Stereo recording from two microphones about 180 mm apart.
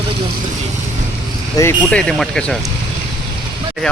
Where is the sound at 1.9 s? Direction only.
5° left (ahead or behind).